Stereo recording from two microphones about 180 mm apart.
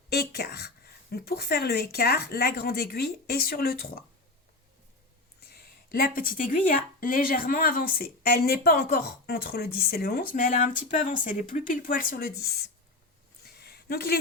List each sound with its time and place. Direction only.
0.1 s speech: 60° left (ahead or behind)
5.4 s speech: 60° left (ahead or behind)
12.4 s speech: 60° left (ahead or behind)
13.4 s a sound: 60° left (ahead or behind)